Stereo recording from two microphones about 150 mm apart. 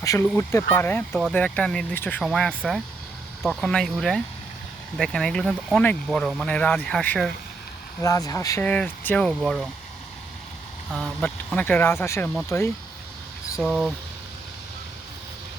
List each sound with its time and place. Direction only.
0.0 s speech: 20° left (ahead or behind); by 7.3 s 5° left (ahead or behind)
8.0 s speech: 25° left (ahead or behind)
8.6 s speech: 10° left (ahead or behind)
10.9 s speech: 5° left (ahead or behind)
13.6 s speech: centre (ahead or behind)